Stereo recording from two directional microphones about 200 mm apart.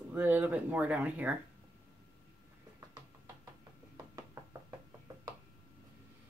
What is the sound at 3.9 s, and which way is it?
Knock, 20° right (ahead or behind).